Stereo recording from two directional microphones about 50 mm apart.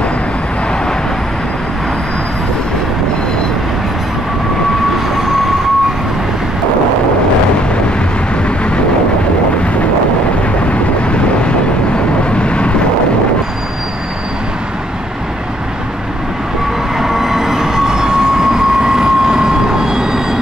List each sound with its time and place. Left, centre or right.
12.4 s vehicle: left
17.0 s train: centre